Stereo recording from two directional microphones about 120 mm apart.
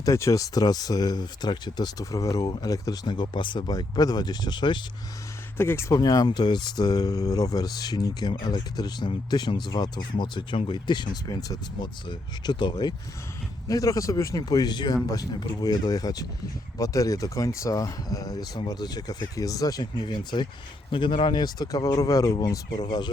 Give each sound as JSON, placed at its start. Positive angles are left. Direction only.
{"t": 0.0, "sound": "speech", "side_deg": 25}
{"t": 5.5, "sound": "speech", "side_deg": 20}
{"t": 6.0, "sound": "speech", "side_deg": 35}